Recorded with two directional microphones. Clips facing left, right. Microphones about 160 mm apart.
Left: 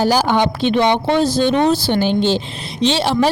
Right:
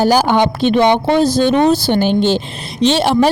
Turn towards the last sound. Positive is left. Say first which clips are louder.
# right 3 dB
turn(degrees=-50)  # may be behind; listen again after turning